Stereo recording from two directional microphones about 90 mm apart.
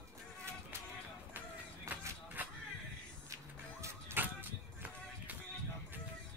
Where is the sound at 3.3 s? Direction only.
30° right (ahead or behind).